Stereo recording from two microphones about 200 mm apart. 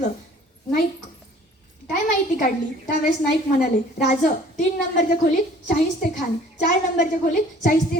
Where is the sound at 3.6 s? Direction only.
50° left (ahead or behind).